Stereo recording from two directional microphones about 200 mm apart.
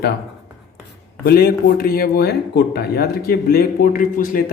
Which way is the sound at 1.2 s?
50° left (ahead or behind).